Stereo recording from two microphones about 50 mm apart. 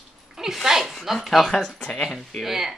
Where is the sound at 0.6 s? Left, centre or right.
Centre.